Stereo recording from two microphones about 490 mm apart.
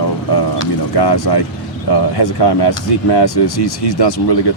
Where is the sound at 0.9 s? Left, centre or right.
Left.